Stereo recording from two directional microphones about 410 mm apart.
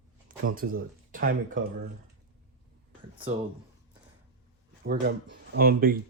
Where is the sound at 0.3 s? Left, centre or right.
Centre.